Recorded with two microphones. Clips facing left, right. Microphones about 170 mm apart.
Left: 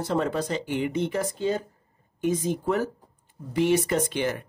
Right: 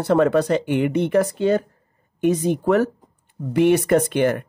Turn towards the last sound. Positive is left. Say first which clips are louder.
# right 8 dB
turn(degrees=-55)  # may be behind; listen again after turning